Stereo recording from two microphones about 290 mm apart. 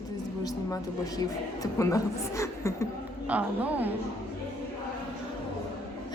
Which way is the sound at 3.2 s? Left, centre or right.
Centre.